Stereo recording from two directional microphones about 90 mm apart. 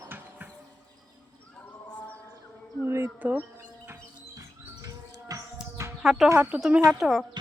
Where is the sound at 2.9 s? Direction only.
30° right (ahead or behind).